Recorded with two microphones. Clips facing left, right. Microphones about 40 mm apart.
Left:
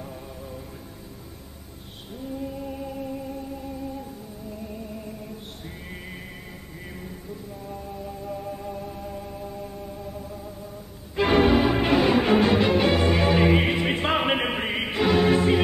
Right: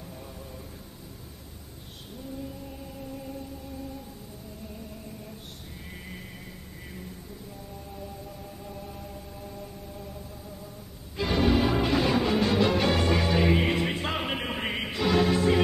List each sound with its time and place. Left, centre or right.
5.9 s music: left
8.5 s music: left
8.8 s music: centre
11.1 s music: left
11.5 s music: left
13.9 s music: left
14.6 s music: centre
14.9 s music: left